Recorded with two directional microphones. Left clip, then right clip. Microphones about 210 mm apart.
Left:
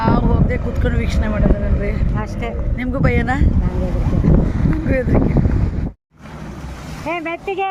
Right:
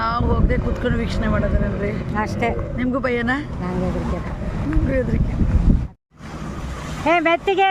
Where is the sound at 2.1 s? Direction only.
25° right (ahead or behind).